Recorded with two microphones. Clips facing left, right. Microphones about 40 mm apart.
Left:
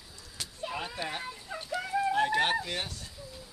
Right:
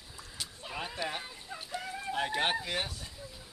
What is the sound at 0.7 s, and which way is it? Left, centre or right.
Speech, centre.